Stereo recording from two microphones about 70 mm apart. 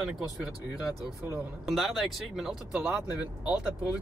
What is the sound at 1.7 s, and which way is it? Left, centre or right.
Speech, centre.